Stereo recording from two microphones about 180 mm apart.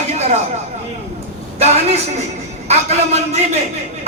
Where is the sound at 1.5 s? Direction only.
35° right (ahead or behind).